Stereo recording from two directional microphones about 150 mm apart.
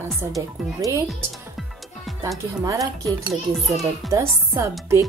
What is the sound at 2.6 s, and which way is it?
Speech, 20° right (ahead or behind).